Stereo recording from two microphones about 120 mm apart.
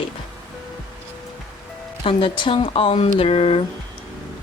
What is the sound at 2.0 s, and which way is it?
Speech, 45° left (ahead or behind).